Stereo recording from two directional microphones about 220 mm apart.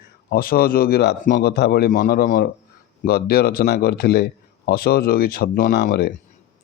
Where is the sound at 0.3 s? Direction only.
40° left (ahead or behind).